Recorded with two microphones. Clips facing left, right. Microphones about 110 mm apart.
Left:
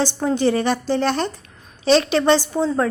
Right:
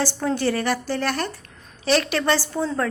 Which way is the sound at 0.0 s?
20° left (ahead or behind).